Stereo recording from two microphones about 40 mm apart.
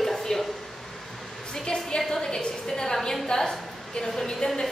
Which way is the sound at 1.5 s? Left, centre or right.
Left.